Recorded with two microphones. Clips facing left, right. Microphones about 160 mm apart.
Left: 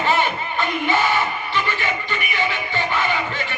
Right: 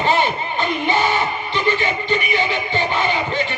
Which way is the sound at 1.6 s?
20° right (ahead or behind).